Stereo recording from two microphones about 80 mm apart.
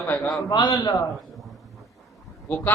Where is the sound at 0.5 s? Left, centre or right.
Left.